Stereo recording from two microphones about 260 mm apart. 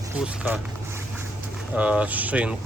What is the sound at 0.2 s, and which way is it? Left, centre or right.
Speech, centre.